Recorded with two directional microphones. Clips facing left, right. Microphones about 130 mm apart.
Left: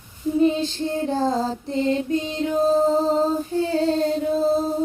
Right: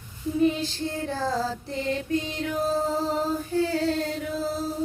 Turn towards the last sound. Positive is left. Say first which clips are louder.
# left 9 dB
turn(degrees=25)  # may be behind; listen again after turning